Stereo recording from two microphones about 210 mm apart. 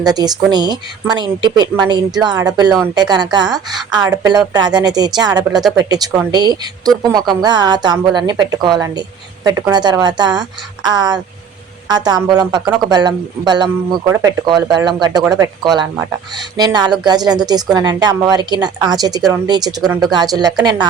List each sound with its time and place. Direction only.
0.0 s a woman's voice: 20° right (ahead or behind)